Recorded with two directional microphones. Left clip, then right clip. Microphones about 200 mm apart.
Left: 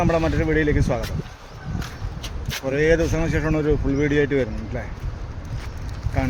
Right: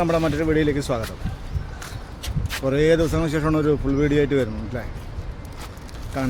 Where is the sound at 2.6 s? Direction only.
15° right (ahead or behind).